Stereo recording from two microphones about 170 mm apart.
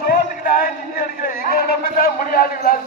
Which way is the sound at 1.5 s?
60° left (ahead or behind).